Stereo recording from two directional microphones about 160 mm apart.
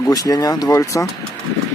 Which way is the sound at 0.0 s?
20° left (ahead or behind).